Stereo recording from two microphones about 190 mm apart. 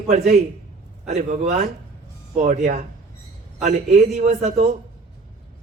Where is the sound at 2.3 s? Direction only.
40° right (ahead or behind).